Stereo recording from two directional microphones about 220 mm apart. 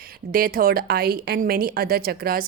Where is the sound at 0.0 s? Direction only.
40° right (ahead or behind).